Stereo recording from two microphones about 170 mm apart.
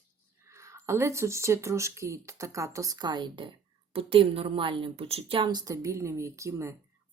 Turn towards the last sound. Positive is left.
turn(degrees=-15)  # may be behind; listen again after turning